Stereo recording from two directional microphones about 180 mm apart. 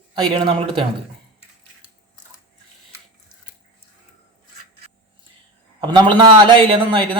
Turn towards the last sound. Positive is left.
turn(degrees=-25)  # may be behind; listen again after turning